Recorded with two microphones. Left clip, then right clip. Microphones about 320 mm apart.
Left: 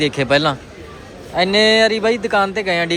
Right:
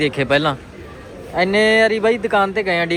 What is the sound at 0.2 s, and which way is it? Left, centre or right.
Speech, centre.